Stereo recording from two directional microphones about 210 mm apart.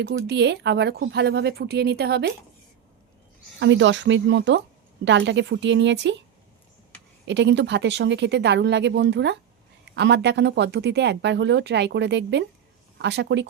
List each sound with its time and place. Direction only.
0.0 s speech: 55° right (ahead or behind)
3.6 s speech: 60° right (ahead or behind)
7.3 s speech: 60° right (ahead or behind)